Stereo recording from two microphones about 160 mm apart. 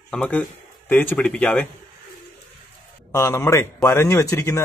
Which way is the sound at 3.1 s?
15° left (ahead or behind).